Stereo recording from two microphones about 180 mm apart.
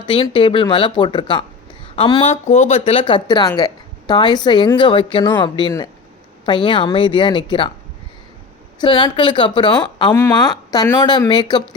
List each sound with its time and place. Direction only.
0.0 s speech: 30° left (ahead or behind)
8.8 s speech: 25° left (ahead or behind)
10.1 s speech: 15° left (ahead or behind)